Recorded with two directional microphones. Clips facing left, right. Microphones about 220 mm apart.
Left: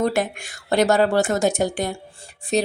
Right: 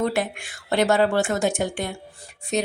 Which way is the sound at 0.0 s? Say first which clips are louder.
Left 2 dB; 45° left (ahead or behind).